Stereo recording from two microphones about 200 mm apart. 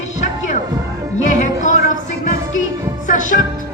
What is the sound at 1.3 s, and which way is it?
Music, 40° left (ahead or behind).